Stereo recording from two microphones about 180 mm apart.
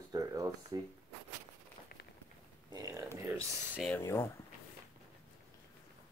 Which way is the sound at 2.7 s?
20° right (ahead or behind).